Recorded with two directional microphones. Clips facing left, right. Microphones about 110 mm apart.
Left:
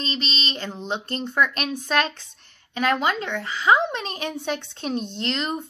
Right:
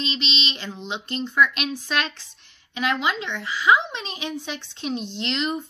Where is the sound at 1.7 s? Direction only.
45° left (ahead or behind).